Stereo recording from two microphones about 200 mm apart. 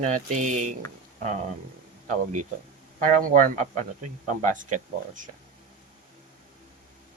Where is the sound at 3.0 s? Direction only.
45° right (ahead or behind).